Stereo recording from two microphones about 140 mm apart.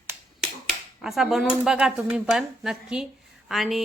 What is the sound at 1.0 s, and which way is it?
Speech, 5° right (ahead or behind).